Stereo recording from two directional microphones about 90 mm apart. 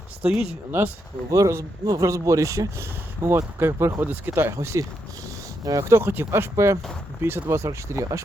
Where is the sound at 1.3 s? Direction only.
35° right (ahead or behind).